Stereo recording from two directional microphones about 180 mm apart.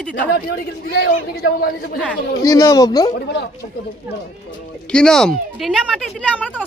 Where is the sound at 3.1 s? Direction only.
70° left (ahead or behind).